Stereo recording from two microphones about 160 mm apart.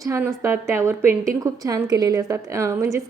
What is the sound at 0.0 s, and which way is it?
A woman's voice, 20° right (ahead or behind).